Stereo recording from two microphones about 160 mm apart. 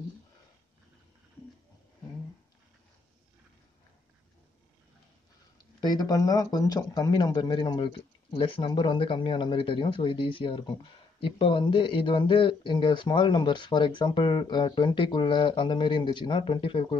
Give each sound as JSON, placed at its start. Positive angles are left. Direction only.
{"t": 5.8, "sound": "speech", "side_deg": 25}